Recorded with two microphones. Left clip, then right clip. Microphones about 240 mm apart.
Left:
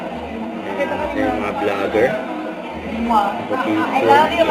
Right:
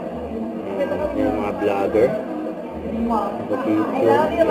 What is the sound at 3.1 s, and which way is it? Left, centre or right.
A woman's voice, centre.